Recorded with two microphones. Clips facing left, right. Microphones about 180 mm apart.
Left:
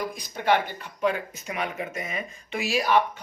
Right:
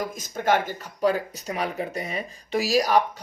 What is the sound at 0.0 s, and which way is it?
Speech, 45° right (ahead or behind).